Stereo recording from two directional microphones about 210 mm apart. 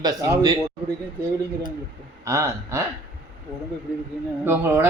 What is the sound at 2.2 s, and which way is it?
Speech, 15° right (ahead or behind).